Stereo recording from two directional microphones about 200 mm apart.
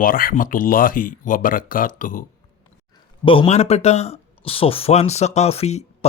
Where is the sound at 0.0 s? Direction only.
45° left (ahead or behind).